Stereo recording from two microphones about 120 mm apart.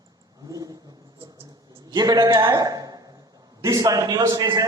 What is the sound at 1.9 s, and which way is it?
A man's voice, 35° right (ahead or behind).